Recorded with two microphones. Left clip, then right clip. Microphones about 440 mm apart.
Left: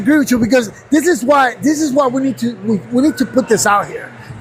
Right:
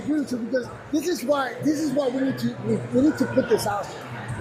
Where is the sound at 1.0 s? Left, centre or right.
Left.